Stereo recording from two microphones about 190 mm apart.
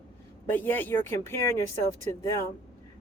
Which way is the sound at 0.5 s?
10° left (ahead or behind).